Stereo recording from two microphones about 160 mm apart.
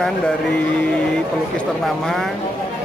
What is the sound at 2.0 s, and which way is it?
Speech, centre (ahead or behind).